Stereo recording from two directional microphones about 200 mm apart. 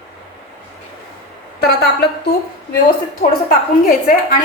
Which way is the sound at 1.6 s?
50° left (ahead or behind).